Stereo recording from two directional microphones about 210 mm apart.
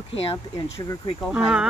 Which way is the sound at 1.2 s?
Centre (ahead or behind).